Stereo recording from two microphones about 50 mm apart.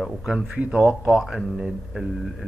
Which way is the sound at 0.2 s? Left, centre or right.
Centre.